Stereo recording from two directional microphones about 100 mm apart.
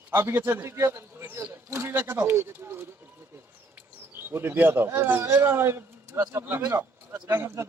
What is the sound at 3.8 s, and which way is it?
A man's voice, 20° right (ahead or behind).